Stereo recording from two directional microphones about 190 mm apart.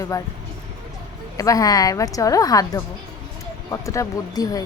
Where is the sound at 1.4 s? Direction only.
20° left (ahead or behind).